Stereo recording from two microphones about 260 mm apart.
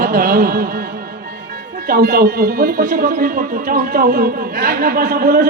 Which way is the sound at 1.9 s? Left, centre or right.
Right.